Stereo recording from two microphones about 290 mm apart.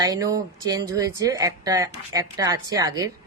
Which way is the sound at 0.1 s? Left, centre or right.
Centre.